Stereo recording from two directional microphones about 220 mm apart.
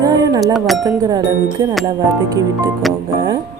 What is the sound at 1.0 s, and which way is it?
Speech, 15° right (ahead or behind).